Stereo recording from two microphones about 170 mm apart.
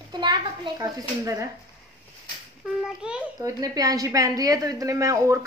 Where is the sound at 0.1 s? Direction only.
25° right (ahead or behind).